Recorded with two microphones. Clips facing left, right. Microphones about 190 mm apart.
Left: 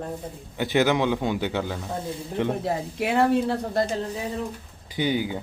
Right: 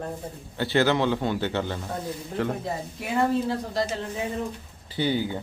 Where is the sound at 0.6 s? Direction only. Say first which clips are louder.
Left 1 dB; 15° left (ahead or behind).